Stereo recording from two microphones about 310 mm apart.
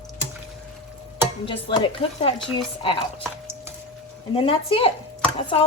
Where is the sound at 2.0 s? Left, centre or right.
Centre.